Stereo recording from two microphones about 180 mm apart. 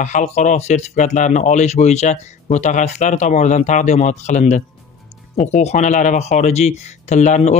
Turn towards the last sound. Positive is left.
turn(degrees=40)  # may be behind; listen again after turning